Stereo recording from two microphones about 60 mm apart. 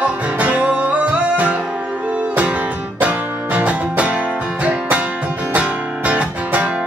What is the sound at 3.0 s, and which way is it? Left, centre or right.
Music, right.